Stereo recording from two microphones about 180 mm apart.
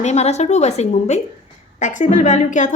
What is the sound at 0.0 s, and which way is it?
A woman's voice, 40° left (ahead or behind).